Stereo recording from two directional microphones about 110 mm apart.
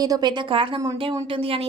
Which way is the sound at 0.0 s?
35° right (ahead or behind).